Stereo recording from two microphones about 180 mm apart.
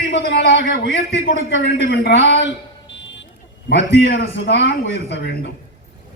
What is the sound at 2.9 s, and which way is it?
Vehicle, 85° left.